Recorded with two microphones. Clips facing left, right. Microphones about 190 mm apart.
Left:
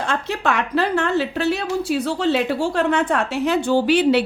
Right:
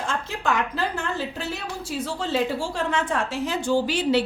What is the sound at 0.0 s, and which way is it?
A woman's voice, 70° left (ahead or behind).